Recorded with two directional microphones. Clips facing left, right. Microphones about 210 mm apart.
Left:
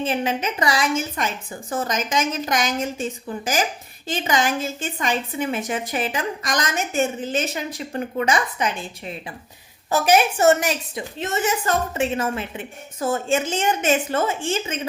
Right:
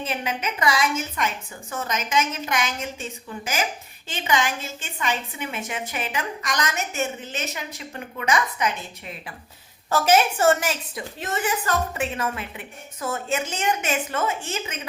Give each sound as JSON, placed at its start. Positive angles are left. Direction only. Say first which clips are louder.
{"t": 0.0, "sound": "a woman's voice", "louder": "left 5 dB", "side_deg": 30}
{"t": 9.9, "sound": "a woman's voice", "louder": "left 1 dB", "side_deg": 15}